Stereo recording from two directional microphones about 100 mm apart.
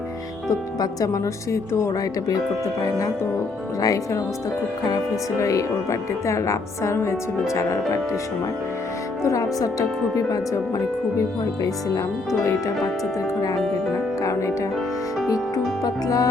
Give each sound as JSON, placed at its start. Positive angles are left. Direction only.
{"t": 0.8, "sound": "a woman's voice", "side_deg": 35}
{"t": 3.8, "sound": "a woman's voice", "side_deg": 35}
{"t": 5.4, "sound": "a woman's voice", "side_deg": 30}
{"t": 9.2, "sound": "a woman's voice", "side_deg": 35}
{"t": 12.3, "sound": "a woman's voice", "side_deg": 30}
{"t": 14.2, "sound": "music", "side_deg": 30}
{"t": 15.8, "sound": "a woman's voice", "side_deg": 35}